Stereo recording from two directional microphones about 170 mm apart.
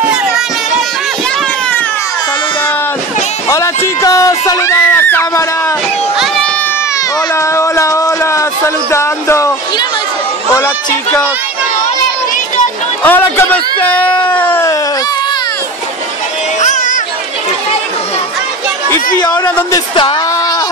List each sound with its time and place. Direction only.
3.4 s speech: 20° left (ahead or behind)
6.1 s speech: centre (ahead or behind)
7.3 s speech: 15° left (ahead or behind)
13.0 s speech: 10° left (ahead or behind)
16.6 s a sound: 45° left (ahead or behind)
20.0 s a sound: 30° left (ahead or behind)